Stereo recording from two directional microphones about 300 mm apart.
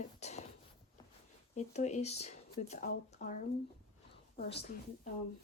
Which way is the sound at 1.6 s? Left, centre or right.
Left.